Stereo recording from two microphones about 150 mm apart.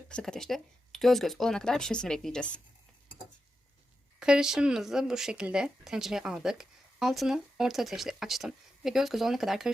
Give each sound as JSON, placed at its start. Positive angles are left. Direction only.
{"t": 0.1, "sound": "speech", "side_deg": 5}
{"t": 4.2, "sound": "speech", "side_deg": -5}